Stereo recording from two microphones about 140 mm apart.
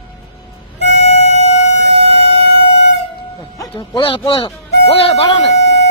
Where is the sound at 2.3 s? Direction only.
45° left (ahead or behind).